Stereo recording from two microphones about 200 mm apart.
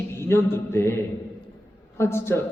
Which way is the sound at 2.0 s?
10° left (ahead or behind).